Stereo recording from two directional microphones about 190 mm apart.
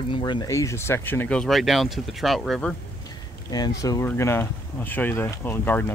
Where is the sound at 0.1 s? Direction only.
25° left (ahead or behind); by 2.7 s centre (ahead or behind).